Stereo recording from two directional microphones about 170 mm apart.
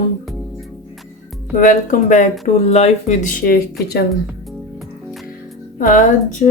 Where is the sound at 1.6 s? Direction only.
50° left (ahead or behind).